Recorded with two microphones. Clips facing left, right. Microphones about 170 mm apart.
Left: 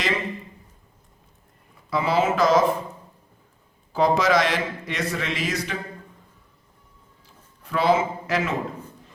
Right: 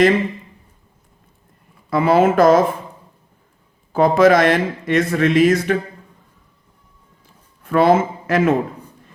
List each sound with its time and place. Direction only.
1.9 s speech: 55° right (ahead or behind)
3.9 s speech: 55° right (ahead or behind)
7.6 s speech: 50° right (ahead or behind)